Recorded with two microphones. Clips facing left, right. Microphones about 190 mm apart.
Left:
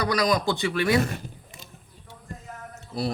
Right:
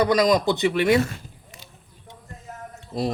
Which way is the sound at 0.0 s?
20° right (ahead or behind).